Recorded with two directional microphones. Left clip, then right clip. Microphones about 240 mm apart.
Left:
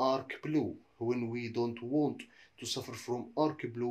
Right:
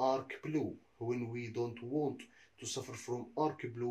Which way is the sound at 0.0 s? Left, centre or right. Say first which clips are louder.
Left 2 dB; left.